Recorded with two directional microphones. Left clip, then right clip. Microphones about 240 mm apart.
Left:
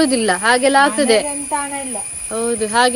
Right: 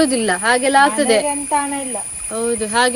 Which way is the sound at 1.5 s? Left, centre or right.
Right.